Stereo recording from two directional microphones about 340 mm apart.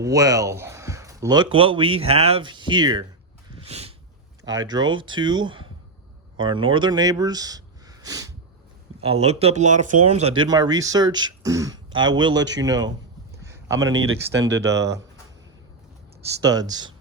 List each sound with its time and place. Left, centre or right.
0.0 s speech: centre
3.5 s a sound: centre
4.7 s speech: centre
12.4 s speech: right
12.6 s speech: centre
13.4 s a sound: centre
13.8 s speech: right
16.4 s speech: centre